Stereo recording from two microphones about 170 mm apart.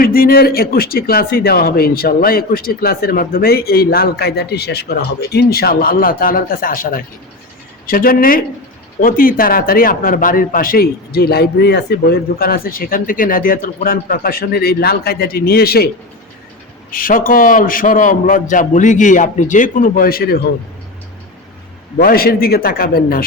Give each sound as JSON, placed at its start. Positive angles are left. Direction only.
{"t": 0.0, "sound": "speech", "side_deg": 60}
{"t": 16.9, "sound": "a man's voice", "side_deg": 55}
{"t": 21.9, "sound": "speech", "side_deg": 60}